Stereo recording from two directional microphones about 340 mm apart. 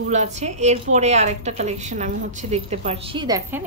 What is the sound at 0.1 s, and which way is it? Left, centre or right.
A woman's voice, centre.